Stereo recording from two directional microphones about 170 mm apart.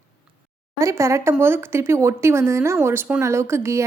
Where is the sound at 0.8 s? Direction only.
20° right (ahead or behind).